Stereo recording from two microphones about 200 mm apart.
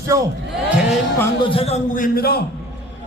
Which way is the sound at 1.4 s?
25° left (ahead or behind).